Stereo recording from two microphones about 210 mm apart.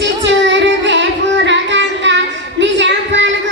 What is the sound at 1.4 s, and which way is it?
Child singing, 60° right (ahead or behind).